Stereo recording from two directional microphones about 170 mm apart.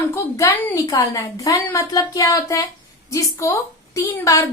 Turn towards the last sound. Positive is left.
turn(degrees=20)  # may be behind; listen again after turning